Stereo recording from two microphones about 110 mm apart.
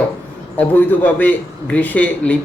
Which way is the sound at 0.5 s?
15° left (ahead or behind).